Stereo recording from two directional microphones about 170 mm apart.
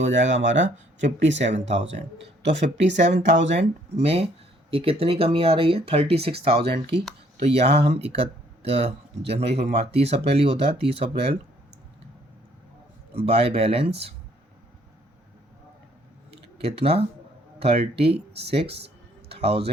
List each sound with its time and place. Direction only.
0.0 s speech: 90° right
3.6 s speech: 40° right (ahead or behind)
13.2 s speech: 35° right (ahead or behind)
16.6 s a man's voice: 35° right (ahead or behind)